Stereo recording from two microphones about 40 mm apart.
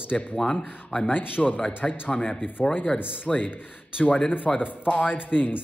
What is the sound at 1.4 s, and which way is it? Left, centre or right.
Speech, centre.